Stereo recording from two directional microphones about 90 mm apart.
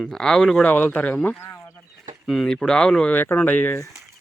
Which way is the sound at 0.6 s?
20° left (ahead or behind).